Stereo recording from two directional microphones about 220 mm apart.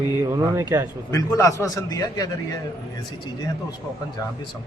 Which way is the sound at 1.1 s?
15° left (ahead or behind).